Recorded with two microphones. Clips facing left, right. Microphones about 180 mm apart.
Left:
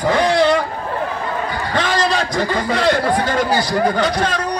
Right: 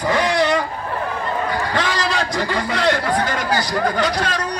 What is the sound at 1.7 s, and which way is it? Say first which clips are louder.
A man's voice: left 3 dB; 25° left (ahead or behind).